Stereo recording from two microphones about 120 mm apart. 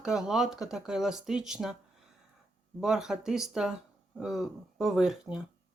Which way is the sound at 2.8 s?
5° right (ahead or behind).